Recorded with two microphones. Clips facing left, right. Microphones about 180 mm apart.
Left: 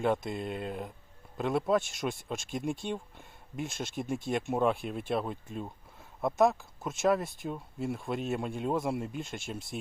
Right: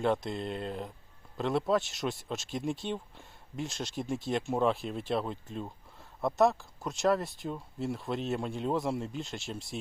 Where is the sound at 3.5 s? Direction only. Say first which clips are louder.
Even; centre (ahead or behind).